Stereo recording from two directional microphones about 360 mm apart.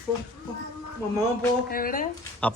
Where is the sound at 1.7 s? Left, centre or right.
Left.